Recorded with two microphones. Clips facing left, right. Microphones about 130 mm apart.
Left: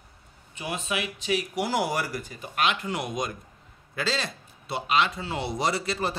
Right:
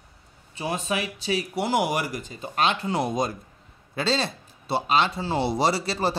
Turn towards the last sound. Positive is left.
turn(degrees=-30)  # may be behind; listen again after turning